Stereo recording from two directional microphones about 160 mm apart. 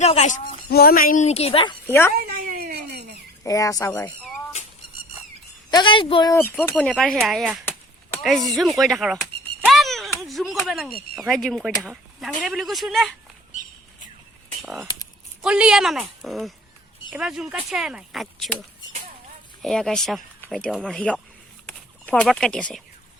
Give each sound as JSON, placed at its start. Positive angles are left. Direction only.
{"t": 0.0, "sound": "speech", "side_deg": 45}
{"t": 0.7, "sound": "speech", "side_deg": 70}
{"t": 1.3, "sound": "a woman's voice", "side_deg": 40}
{"t": 1.9, "sound": "speech", "side_deg": 15}
{"t": 2.2, "sound": "a sound", "side_deg": -65}
{"t": 3.4, "sound": "speech", "side_deg": 20}
{"t": 5.7, "sound": "a woman's voice", "side_deg": 30}
{"t": 6.3, "sound": "speech", "side_deg": 15}
{"t": 7.6, "sound": "chop", "side_deg": 15}
{"t": 8.2, "sound": "speech", "side_deg": 0}
{"t": 9.6, "sound": "a sound", "side_deg": 0}
{"t": 10.7, "sound": "speech", "side_deg": 0}
{"t": 14.6, "sound": "speech", "side_deg": 0}
{"t": 19.6, "sound": "speech", "side_deg": 5}